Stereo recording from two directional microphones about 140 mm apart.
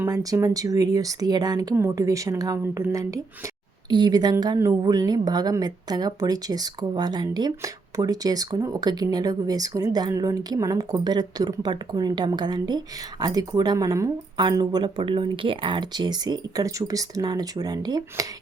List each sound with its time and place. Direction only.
0.1 s speech: 25° right (ahead or behind)